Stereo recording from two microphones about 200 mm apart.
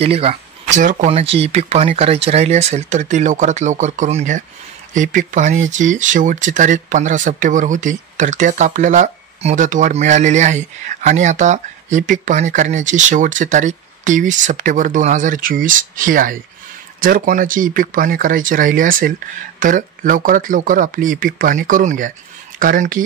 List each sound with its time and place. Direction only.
0.0 s speech: 30° right (ahead or behind)